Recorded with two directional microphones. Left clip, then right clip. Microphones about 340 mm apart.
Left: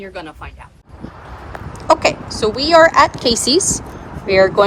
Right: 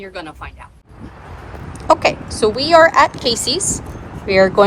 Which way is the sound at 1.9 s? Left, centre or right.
Centre.